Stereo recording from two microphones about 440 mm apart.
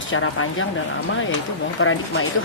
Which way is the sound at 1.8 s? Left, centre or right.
Left.